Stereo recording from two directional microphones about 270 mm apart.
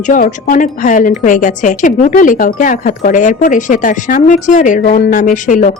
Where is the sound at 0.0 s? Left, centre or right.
Left.